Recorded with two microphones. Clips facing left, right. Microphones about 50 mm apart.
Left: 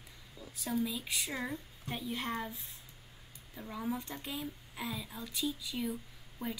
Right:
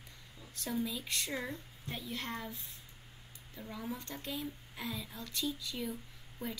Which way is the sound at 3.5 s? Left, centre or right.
Centre.